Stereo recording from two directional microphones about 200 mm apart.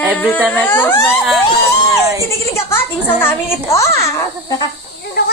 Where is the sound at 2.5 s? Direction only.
10° left (ahead or behind).